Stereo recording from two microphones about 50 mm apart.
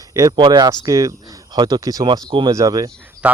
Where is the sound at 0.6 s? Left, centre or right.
Right.